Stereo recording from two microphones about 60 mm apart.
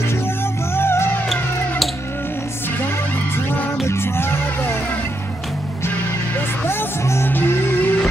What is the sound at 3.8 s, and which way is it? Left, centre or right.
Music, left.